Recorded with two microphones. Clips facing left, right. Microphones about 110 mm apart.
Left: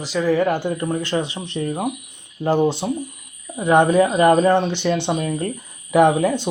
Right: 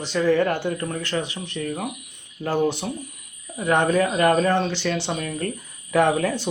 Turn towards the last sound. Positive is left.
turn(degrees=15)  # may be behind; listen again after turning